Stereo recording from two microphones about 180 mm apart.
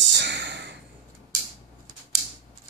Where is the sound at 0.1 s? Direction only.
75° right (ahead or behind).